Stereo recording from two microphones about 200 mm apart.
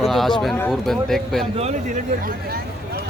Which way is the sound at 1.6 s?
35° right (ahead or behind).